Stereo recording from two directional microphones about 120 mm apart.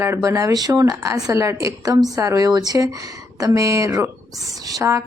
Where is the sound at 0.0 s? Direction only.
25° right (ahead or behind).